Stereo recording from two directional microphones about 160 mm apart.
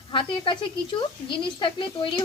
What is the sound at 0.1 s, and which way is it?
A woman's voice, 30° left (ahead or behind).